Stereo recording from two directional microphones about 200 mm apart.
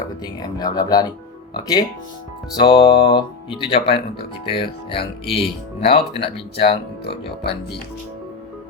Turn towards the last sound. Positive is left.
turn(degrees=25)  # may be behind; listen again after turning